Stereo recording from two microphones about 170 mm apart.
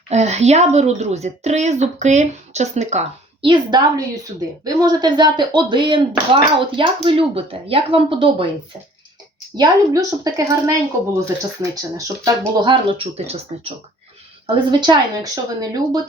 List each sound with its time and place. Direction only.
0.1 s speech: 40° right (ahead or behind)
3.4 s a woman's voice: 25° right (ahead or behind)
9.6 s a woman's voice: 20° right (ahead or behind)
12.6 s speech: 30° right (ahead or behind)
14.4 s a woman's voice: 25° right (ahead or behind)